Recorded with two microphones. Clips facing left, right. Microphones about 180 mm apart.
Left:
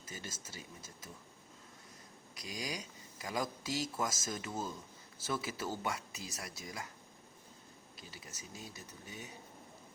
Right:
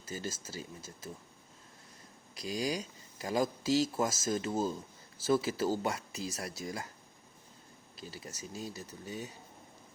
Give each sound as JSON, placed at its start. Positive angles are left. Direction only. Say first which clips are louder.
{"t": 0.1, "sound": "speech", "louder": "right 8 dB", "side_deg": -35}
{"t": 2.3, "sound": "speech", "louder": "right 8 dB", "side_deg": -30}
{"t": 7.9, "sound": "speech", "louder": "right 8 dB", "side_deg": -35}